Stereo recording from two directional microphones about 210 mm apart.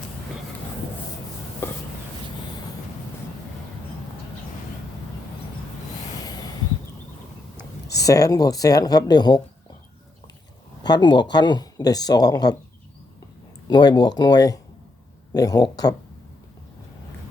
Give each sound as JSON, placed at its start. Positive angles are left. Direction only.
{"t": 6.2, "sound": "a sound", "side_deg": 20}
{"t": 8.0, "sound": "speech", "side_deg": 15}
{"t": 10.8, "sound": "speech", "side_deg": 20}
{"t": 13.7, "sound": "speech", "side_deg": 20}